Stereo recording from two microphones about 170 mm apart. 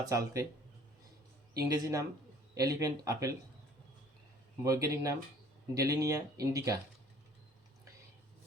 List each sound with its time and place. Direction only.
0.1 s speech: 20° right (ahead or behind)
1.5 s speech: 20° right (ahead or behind)
4.6 s speech: 20° right (ahead or behind)